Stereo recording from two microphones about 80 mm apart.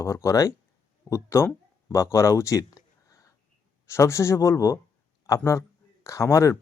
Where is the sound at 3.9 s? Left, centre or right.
Left.